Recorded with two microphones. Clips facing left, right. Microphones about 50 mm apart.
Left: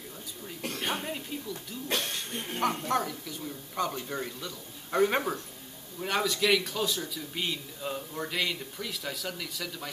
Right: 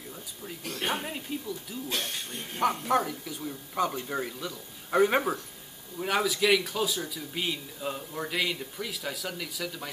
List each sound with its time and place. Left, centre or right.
0.8 s speech: centre
1.9 s speech: left
2.6 s a man's voice: centre